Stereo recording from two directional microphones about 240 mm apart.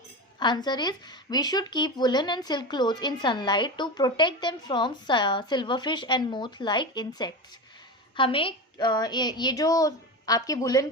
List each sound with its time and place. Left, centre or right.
0.3 s a woman's voice: centre